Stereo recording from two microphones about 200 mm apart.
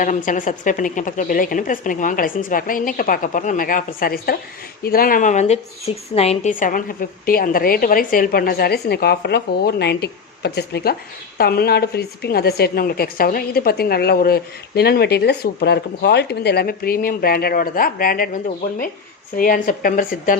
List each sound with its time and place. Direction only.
0.0 s a woman's voice: 40° left (ahead or behind)